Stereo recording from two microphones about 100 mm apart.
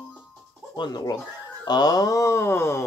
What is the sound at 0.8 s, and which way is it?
Speech, 45° left (ahead or behind).